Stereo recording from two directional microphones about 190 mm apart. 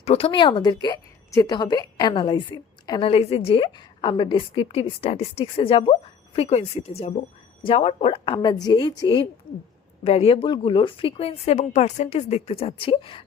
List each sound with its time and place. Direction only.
0.0 s a woman's voice: 30° left (ahead or behind)